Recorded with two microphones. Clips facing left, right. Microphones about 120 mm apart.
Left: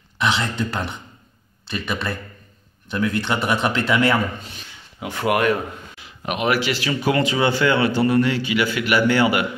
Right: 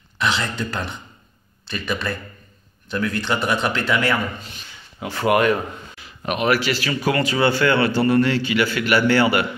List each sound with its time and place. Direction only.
0.2 s speech: 20° left (ahead or behind)
5.0 s speech: 10° left (ahead or behind)
5.9 s speech: 15° left (ahead or behind)